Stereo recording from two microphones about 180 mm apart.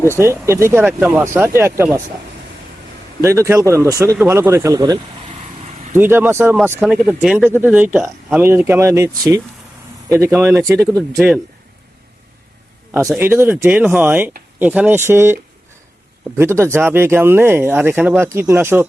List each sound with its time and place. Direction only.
0.2 s speech: 15° right (ahead or behind)
3.2 s speech: 15° right (ahead or behind)
5.6 s vehicle: 40° right (ahead or behind)
5.9 s speech: 10° right (ahead or behind)
13.1 s speech: 10° right (ahead or behind)